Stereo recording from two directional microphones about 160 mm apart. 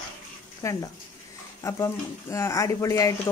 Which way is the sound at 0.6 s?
20° left (ahead or behind).